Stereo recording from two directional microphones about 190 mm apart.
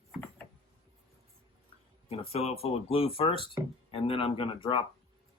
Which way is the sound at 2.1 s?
30° left (ahead or behind).